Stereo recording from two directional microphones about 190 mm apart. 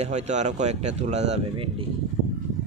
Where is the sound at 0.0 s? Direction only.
35° right (ahead or behind).